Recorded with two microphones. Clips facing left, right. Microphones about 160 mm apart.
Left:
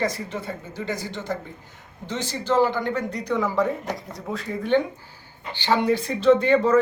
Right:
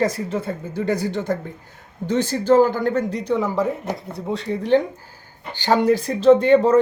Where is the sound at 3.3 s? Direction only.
20° right (ahead or behind).